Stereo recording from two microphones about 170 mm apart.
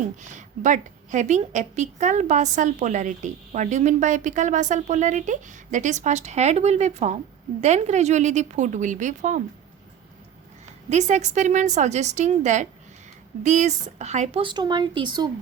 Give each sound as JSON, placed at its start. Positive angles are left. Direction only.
{"t": 0.2, "sound": "a woman's voice", "side_deg": -45}
{"t": 10.8, "sound": "a woman's voice", "side_deg": -40}
{"t": 14.4, "sound": "speech", "side_deg": -25}